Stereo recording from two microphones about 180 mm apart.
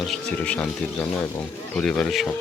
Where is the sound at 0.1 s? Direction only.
5° left (ahead or behind).